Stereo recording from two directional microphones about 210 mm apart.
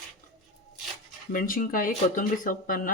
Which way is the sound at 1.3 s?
40° left (ahead or behind).